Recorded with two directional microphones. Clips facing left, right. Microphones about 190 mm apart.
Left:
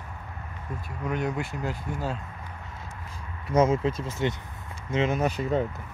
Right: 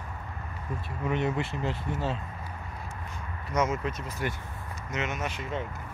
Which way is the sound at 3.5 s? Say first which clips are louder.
Left 6 dB; 30° left (ahead or behind).